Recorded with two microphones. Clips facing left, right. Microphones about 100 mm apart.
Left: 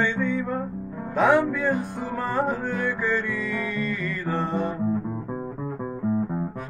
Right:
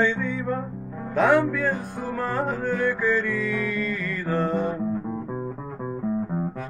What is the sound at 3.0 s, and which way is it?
Music, centre (ahead or behind).